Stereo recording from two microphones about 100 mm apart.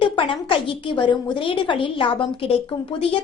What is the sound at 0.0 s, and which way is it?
A woman's voice, 60° left (ahead or behind).